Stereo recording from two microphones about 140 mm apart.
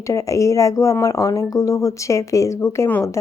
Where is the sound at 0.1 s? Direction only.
20° left (ahead or behind).